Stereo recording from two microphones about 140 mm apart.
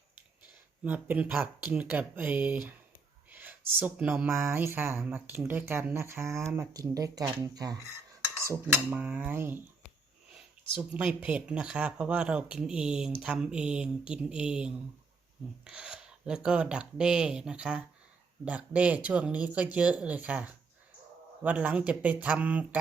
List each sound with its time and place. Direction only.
0.9 s speech: 10° right (ahead or behind)
8.4 s speech: 15° right (ahead or behind)